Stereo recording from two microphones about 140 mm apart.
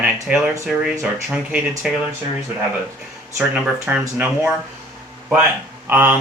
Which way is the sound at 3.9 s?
10° right (ahead or behind).